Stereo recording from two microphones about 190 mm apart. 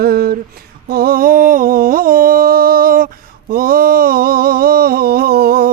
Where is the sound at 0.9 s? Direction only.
50° right (ahead or behind).